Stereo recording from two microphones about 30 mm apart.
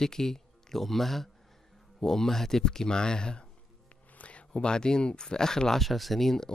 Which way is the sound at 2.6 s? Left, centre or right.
Left.